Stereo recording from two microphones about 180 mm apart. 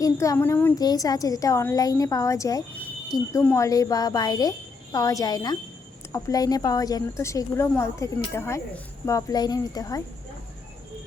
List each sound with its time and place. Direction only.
0.0 s a woman's voice: 20° left (ahead or behind)